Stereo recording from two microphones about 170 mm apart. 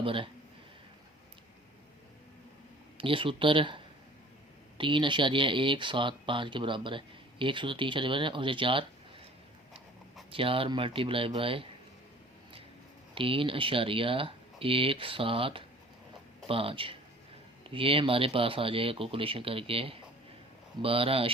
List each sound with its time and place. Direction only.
0.0 s speech: 30° right (ahead or behind)
3.0 s speech: 30° right (ahead or behind)
4.8 s speech: 30° right (ahead or behind)
10.3 s speech: 30° right (ahead or behind)
13.1 s speech: 30° right (ahead or behind)